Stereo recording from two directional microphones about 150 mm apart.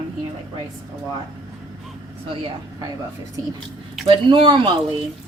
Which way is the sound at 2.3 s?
35° right (ahead or behind).